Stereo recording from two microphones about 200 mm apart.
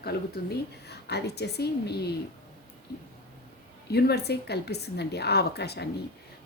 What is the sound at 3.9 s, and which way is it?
A woman's voice, 55° left (ahead or behind).